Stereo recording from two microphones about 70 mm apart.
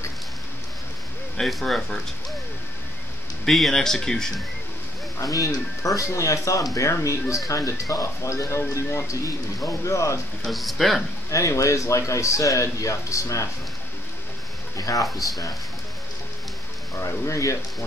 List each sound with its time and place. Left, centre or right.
1.3 s speech: centre
3.4 s speech: centre
5.2 s a man's voice: left
10.4 s speech: centre
11.2 s a man's voice: left
14.8 s speech: left
15.1 s speech: centre
16.9 s a man's voice: left